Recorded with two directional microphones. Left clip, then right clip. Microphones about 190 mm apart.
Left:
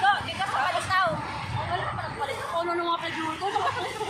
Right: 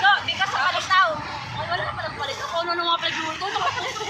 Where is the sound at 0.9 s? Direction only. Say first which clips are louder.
Right 7 dB; centre (ahead or behind).